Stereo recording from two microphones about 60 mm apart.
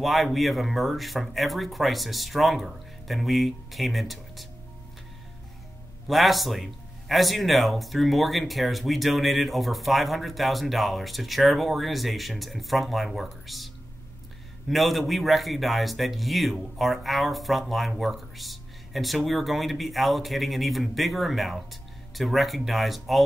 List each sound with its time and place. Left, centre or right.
0.0 s speech: centre
6.0 s speech: centre
14.7 s speech: centre